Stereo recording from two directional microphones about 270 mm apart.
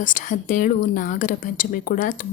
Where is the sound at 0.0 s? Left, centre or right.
Left.